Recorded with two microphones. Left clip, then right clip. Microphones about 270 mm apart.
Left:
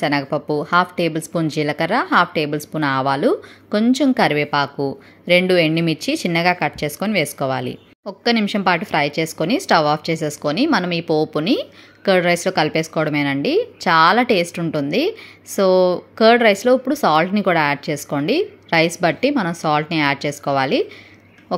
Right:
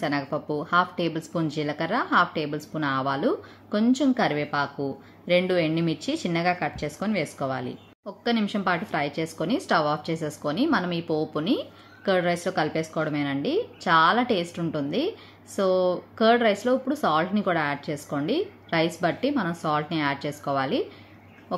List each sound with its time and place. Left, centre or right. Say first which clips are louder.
0.0 s speech: left 8 dB; left